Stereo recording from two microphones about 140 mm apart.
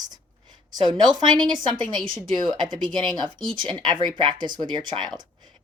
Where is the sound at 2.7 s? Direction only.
Centre (ahead or behind).